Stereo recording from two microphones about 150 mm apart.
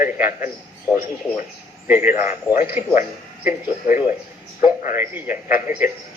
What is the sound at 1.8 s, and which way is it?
A man's voice, 15° right (ahead or behind).